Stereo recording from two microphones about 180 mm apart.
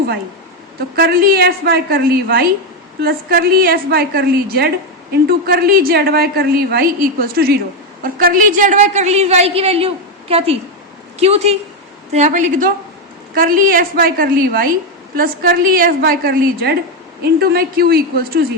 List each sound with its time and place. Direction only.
0.9 s a woman's voice: 55° right (ahead or behind)